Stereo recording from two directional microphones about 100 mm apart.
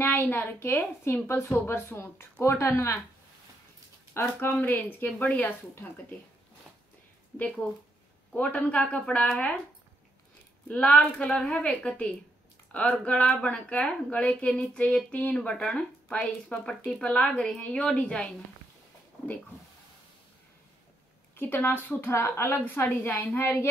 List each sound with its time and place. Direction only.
0.0 s a woman's voice: 20° left (ahead or behind)
4.1 s speech: 25° left (ahead or behind)
7.3 s speech: 15° left (ahead or behind)
10.7 s speech: 15° left (ahead or behind)
21.4 s a woman's voice: 20° left (ahead or behind)